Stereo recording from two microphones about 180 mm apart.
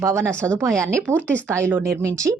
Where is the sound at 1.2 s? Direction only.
10° left (ahead or behind).